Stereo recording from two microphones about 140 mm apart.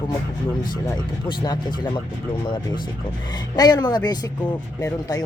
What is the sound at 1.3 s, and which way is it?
Speech, 35° left (ahead or behind).